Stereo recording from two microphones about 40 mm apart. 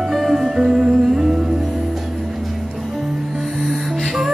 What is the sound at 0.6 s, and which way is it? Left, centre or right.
Music, centre.